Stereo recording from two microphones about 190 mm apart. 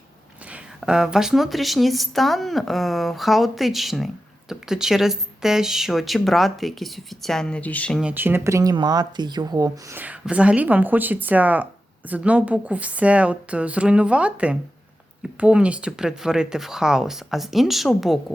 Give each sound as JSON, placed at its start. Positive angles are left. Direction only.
{"t": 0.5, "sound": "a woman's voice", "side_deg": -5}
{"t": 8.0, "sound": "a woman's voice", "side_deg": -10}